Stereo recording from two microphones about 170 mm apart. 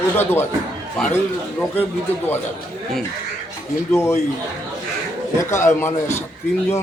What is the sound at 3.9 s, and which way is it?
Speech, 15° left (ahead or behind).